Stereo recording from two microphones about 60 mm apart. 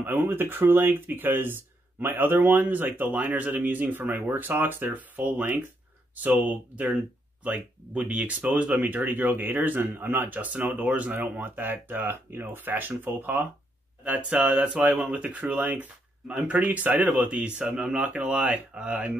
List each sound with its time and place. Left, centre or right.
0.0 s speech: right